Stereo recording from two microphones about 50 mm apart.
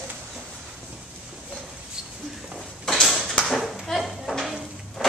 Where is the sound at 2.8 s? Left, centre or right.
Centre.